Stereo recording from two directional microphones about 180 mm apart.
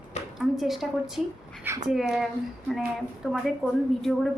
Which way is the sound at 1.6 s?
15° right (ahead or behind).